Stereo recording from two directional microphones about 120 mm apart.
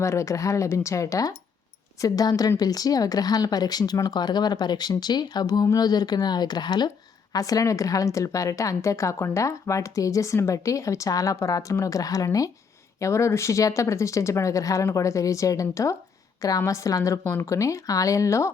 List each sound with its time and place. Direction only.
0.0 s a woman's voice: 25° left (ahead or behind)